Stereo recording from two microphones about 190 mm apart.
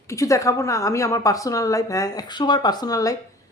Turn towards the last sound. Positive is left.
turn(degrees=20)  # may be behind; listen again after turning